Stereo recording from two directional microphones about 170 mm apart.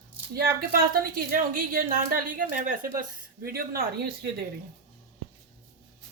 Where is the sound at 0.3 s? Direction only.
60° right (ahead or behind).